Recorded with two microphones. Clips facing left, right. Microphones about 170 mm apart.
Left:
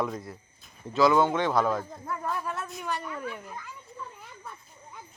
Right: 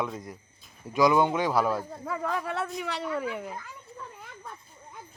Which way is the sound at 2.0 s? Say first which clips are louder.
Right 5 dB; 85° right.